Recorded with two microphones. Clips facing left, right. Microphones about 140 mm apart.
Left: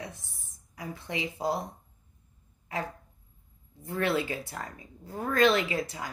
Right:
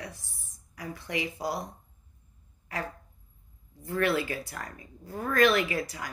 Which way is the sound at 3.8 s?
20° left (ahead or behind).